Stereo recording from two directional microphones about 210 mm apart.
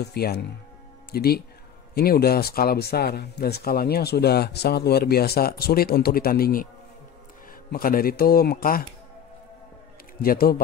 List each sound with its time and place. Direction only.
0.0 s speech: 50° left (ahead or behind)
7.7 s speech: 45° left (ahead or behind)
10.1 s a man's voice: 45° left (ahead or behind)